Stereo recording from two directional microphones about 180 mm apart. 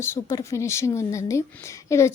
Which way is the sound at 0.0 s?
15° left (ahead or behind).